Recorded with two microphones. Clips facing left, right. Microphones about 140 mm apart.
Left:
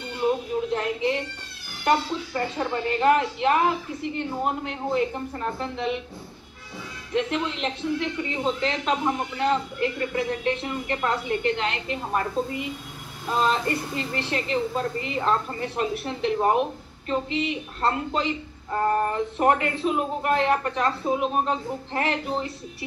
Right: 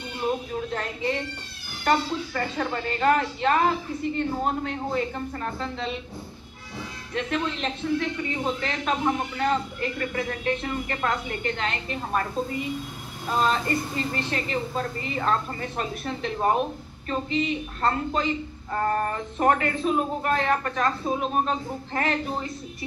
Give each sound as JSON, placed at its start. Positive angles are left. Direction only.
{"t": 0.7, "sound": "a woman's voice", "side_deg": 15}
{"t": 7.2, "sound": "a man's voice", "side_deg": 15}